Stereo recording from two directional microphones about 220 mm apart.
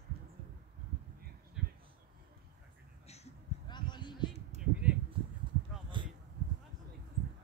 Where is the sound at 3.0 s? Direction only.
30° left (ahead or behind).